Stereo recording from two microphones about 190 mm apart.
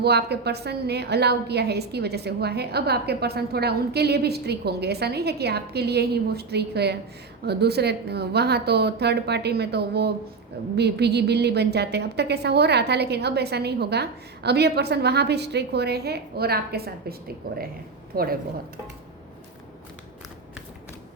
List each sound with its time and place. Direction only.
0.0 s a woman's voice: 60° right (ahead or behind)